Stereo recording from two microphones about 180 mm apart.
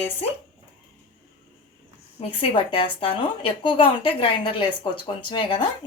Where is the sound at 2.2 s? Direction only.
30° left (ahead or behind).